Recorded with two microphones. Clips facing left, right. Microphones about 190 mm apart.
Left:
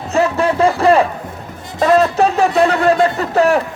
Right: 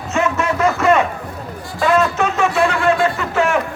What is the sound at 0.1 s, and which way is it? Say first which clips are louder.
A man's voice: left 4 dB; 35° left (ahead or behind).